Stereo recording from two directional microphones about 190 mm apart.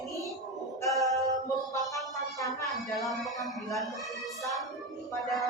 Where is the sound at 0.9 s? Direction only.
Centre (ahead or behind).